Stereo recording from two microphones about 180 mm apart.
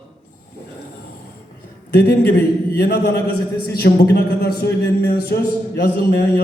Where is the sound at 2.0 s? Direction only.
60° left (ahead or behind).